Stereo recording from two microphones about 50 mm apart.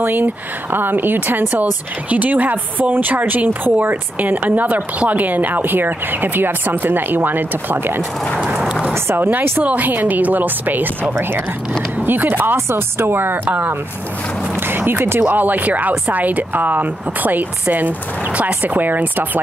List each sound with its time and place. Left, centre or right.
0.0 s a woman's voice: right
9.1 s speech: right
9.6 s a woman's voice: right
12.5 s speech: right
15.2 s a woman's voice: right